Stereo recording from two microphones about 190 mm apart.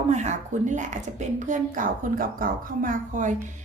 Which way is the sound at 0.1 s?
40° right (ahead or behind).